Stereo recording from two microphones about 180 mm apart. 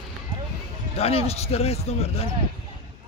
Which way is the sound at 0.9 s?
35° left (ahead or behind).